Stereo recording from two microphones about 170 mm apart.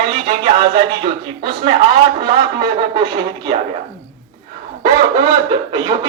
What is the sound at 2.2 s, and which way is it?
Speech, 30° right (ahead or behind).